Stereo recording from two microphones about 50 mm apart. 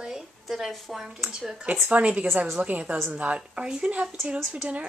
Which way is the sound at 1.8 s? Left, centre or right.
Right.